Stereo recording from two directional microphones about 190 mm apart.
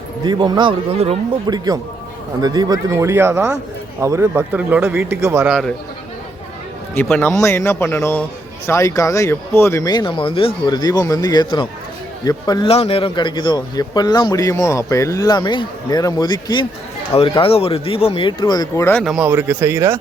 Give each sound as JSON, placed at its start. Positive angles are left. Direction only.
{"t": 0.3, "sound": "speech", "side_deg": -20}
{"t": 6.9, "sound": "a man's voice", "side_deg": 10}
{"t": 19.0, "sound": "speech", "side_deg": -5}